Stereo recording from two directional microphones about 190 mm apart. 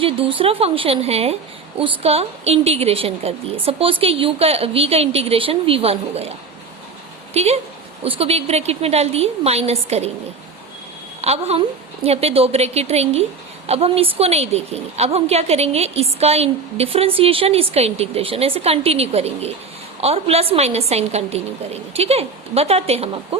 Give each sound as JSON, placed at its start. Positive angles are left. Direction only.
{"t": 0.0, "sound": "a woman's voice", "side_deg": -30}
{"t": 7.3, "sound": "a woman's voice", "side_deg": -35}
{"t": 11.2, "sound": "a woman's voice", "side_deg": -35}